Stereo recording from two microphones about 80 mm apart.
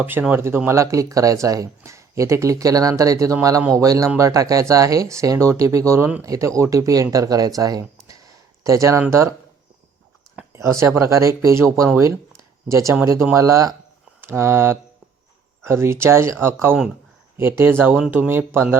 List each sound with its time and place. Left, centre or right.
0.0 s speech: right
10.5 s speech: right
11.9 s a sound: right
13.3 s speech: right